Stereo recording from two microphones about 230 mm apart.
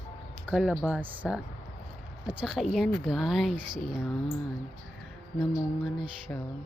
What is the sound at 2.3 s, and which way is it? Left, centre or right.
Speech, centre.